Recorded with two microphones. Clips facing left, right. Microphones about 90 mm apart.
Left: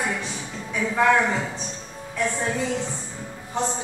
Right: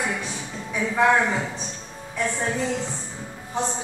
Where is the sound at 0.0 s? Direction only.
5° right (ahead or behind).